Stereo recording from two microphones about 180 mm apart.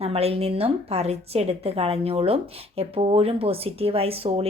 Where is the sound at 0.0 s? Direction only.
35° right (ahead or behind).